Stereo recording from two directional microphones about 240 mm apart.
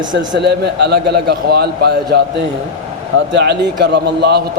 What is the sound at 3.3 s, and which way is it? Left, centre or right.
A man's voice, right.